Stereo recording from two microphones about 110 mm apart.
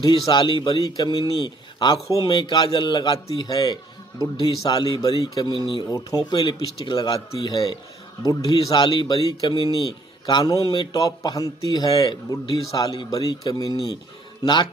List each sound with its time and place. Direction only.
0.0 s a man's voice: 40° left (ahead or behind)
8.2 s a man's voice: 35° left (ahead or behind)